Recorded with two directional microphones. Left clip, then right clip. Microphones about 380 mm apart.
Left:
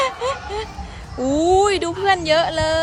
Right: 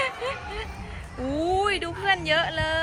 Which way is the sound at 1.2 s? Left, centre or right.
Centre.